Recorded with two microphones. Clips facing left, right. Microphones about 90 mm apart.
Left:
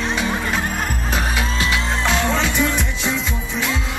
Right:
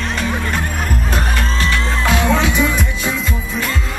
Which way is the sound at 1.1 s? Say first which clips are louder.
Right 1 dB; centre (ahead or behind).